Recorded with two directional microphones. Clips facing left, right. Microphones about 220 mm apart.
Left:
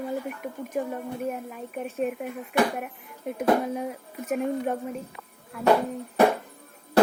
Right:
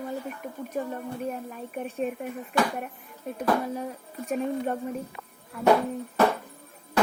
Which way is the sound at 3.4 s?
15° left (ahead or behind).